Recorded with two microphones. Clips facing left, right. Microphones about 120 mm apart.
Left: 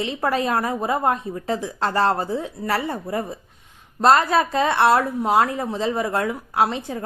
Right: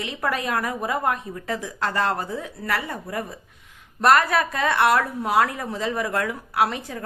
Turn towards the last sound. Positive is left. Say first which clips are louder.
# left 2 dB
turn(degrees=25)  # may be behind; listen again after turning